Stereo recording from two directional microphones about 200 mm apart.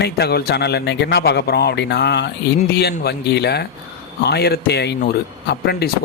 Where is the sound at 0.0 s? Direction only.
55° left (ahead or behind).